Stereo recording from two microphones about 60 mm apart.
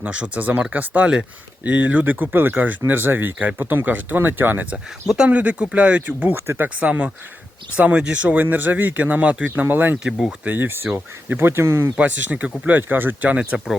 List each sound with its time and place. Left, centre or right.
0.0 s speech: right
5.0 s speech: centre
5.3 s speech: right
6.3 s speech: right
6.7 s speech: right
10.0 s speech: centre
10.4 s speech: right
11.9 s speech: right